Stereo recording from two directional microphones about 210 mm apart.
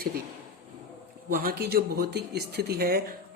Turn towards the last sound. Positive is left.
turn(degrees=-45)  # may be behind; listen again after turning